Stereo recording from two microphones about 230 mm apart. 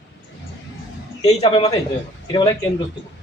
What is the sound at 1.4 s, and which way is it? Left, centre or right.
Speech, left.